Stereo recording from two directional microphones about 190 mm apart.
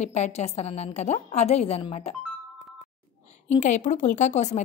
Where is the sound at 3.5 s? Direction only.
40° left (ahead or behind).